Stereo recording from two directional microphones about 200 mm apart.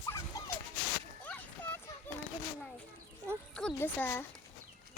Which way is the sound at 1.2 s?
10° left (ahead or behind).